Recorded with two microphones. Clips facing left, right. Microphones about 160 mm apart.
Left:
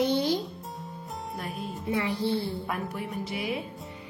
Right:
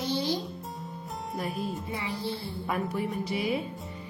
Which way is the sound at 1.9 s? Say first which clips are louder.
Left 6 dB; 65° left (ahead or behind).